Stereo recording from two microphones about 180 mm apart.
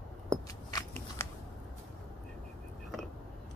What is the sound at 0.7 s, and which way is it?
Scissors, 15° left (ahead or behind).